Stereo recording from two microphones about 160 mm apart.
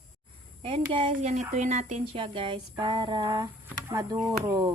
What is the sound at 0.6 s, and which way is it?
Speech, 35° right (ahead or behind).